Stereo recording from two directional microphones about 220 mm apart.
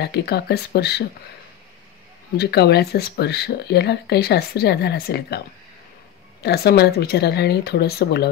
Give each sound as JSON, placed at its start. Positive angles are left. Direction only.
{"t": 0.0, "sound": "speech", "side_deg": 50}
{"t": 2.3, "sound": "speech", "side_deg": 45}
{"t": 6.4, "sound": "speech", "side_deg": 45}